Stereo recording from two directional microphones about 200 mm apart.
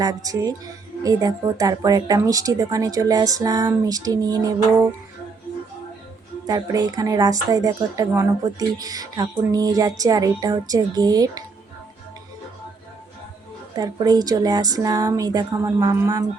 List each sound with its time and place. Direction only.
0.0 s speech: 20° right (ahead or behind)
6.4 s speech: 20° right (ahead or behind)
13.7 s speech: 20° right (ahead or behind)